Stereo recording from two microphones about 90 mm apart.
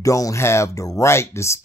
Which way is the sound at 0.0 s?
40° left (ahead or behind).